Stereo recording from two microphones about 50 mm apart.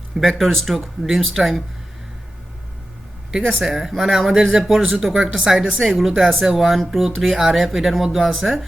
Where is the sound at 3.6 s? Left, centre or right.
Centre.